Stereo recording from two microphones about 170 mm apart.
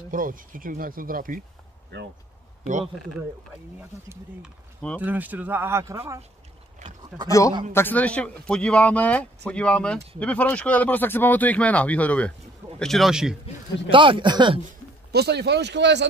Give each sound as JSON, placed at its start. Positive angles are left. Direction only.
{"t": 0.1, "sound": "speech", "side_deg": -55}
{"t": 5.0, "sound": "speech", "side_deg": -10}
{"t": 7.2, "sound": "a man's voice", "side_deg": 20}
{"t": 13.8, "sound": "speech", "side_deg": -30}
{"t": 15.1, "sound": "speech", "side_deg": -75}